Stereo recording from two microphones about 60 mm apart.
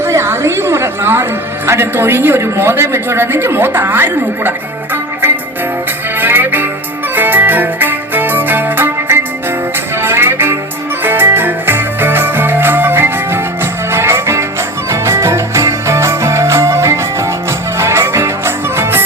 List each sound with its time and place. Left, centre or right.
0.0 s a woman's voice: right
6.1 s music: right